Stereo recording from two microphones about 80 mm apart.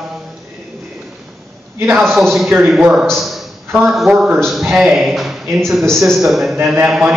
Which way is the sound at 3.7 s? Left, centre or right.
Right.